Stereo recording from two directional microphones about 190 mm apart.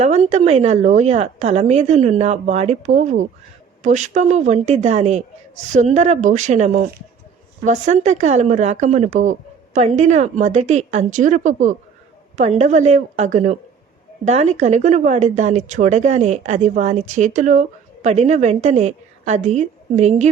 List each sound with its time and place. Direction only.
0.0 s speech: 35° right (ahead or behind)